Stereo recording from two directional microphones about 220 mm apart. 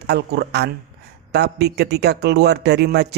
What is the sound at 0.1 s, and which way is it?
A man's voice, 50° right (ahead or behind).